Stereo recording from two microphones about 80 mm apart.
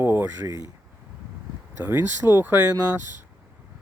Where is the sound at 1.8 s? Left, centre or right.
Right.